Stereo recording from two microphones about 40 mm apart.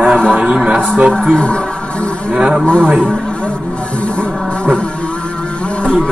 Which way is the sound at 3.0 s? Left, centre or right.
Left.